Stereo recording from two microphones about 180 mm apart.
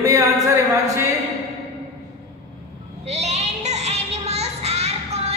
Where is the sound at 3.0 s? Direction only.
35° right (ahead or behind).